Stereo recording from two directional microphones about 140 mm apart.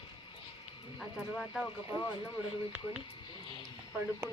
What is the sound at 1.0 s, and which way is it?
Speech, centre (ahead or behind).